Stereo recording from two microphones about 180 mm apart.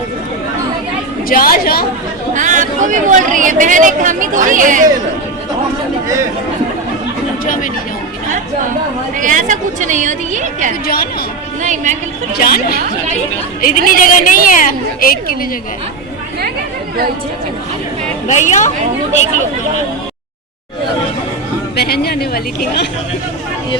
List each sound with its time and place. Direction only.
1.3 s a woman's voice: 55° left (ahead or behind)
2.3 s speech: 45° right (ahead or behind)
7.4 s speech: 50° left (ahead or behind)
9.1 s speech: 45° right (ahead or behind)
10.8 s a woman's voice: 60° left (ahead or behind)
11.6 s speech: 45° right (ahead or behind)
12.4 s a woman's voice: 60° left (ahead or behind)
18.3 s a woman's voice: 40° left (ahead or behind)
21.8 s a woman's voice: 60° left (ahead or behind)